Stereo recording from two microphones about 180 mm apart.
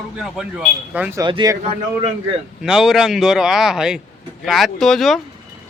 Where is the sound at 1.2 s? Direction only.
25° right (ahead or behind).